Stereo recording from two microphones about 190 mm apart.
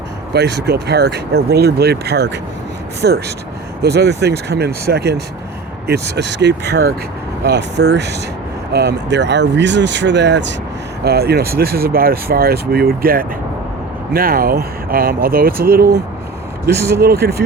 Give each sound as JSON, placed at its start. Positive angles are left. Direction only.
{"t": 0.3, "sound": "speech", "side_deg": -60}
{"t": 11.0, "sound": "speech", "side_deg": -55}